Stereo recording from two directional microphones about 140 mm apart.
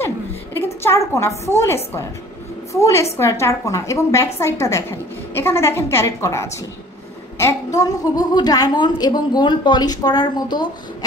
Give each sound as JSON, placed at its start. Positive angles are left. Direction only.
{"t": 0.8, "sound": "a woman's voice", "side_deg": 20}